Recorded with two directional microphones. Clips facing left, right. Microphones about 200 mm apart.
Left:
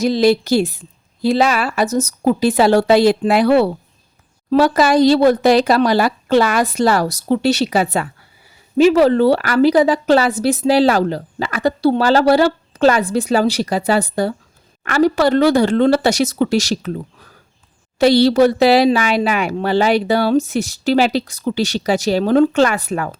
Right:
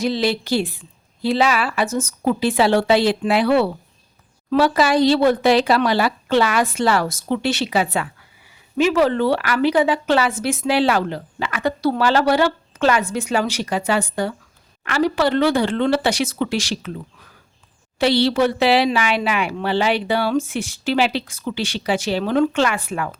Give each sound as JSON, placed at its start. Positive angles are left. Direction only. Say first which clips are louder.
{"t": 0.0, "sound": "a woman's voice", "louder": "left 7 dB", "side_deg": 40}